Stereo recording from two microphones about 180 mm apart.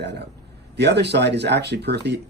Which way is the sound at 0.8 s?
70° right (ahead or behind).